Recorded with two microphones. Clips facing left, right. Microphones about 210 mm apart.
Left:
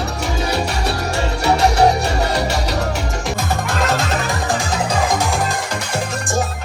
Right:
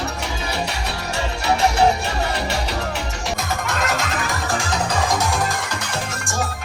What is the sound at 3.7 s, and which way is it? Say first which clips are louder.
Music: left 5 dB; 30° left (ahead or behind).